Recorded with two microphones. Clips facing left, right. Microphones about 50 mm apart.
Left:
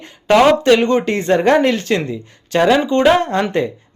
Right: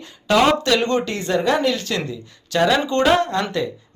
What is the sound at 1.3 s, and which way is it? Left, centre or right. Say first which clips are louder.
Speech: left 5 dB; left.